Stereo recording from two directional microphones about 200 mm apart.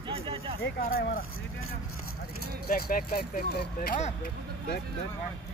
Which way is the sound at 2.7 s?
45° left (ahead or behind).